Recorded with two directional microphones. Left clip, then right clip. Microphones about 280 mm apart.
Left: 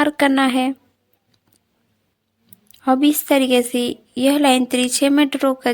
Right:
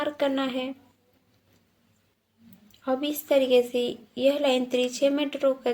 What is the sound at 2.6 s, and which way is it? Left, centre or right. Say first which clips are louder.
A woman's voice: left 12 dB; left.